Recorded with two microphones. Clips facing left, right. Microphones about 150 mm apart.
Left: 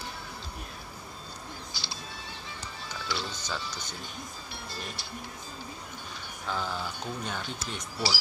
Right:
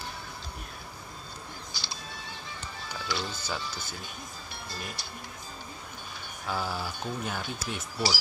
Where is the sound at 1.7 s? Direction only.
45° right (ahead or behind).